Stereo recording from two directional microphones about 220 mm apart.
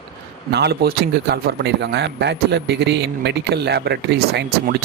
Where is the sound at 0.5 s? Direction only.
50° right (ahead or behind).